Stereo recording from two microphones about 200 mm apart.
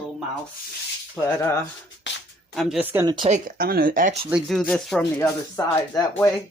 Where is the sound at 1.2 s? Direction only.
10° left (ahead or behind).